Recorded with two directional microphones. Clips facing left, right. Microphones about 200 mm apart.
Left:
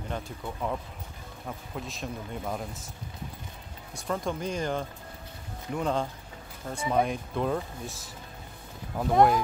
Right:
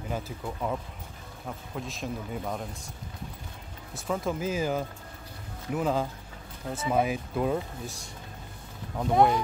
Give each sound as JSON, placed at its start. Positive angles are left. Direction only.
{"t": 0.1, "sound": "speech", "side_deg": -5}
{"t": 1.8, "sound": "speech", "side_deg": 0}
{"t": 3.9, "sound": "speech", "side_deg": -5}